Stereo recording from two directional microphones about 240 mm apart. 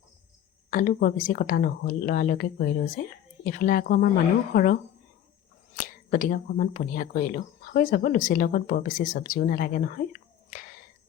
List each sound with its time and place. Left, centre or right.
0.7 s speech: left